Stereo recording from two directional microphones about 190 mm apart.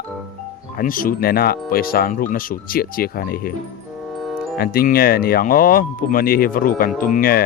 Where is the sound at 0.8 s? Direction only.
45° left (ahead or behind).